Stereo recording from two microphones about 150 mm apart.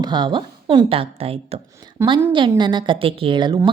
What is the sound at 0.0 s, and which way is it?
A woman's voice, 30° right (ahead or behind).